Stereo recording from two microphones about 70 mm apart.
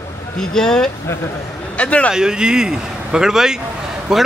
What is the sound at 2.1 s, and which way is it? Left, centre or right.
A man's voice, centre.